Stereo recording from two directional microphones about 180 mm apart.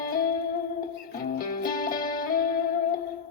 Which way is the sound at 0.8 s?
55° left (ahead or behind).